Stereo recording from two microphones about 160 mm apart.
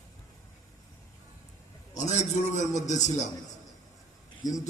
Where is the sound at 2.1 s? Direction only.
45° left (ahead or behind).